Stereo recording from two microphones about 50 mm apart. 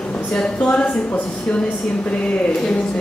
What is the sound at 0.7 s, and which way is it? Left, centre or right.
Speech, left.